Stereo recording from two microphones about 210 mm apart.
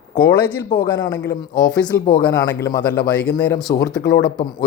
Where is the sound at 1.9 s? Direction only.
10° left (ahead or behind).